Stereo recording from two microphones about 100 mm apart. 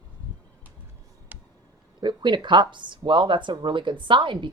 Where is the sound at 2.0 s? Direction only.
50° right (ahead or behind).